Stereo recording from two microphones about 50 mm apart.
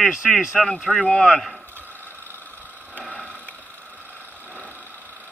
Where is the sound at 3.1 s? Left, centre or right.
Left.